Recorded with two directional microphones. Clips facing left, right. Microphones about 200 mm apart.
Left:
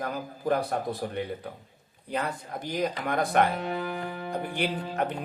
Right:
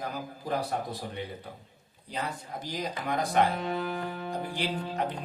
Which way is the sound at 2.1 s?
55° left (ahead or behind).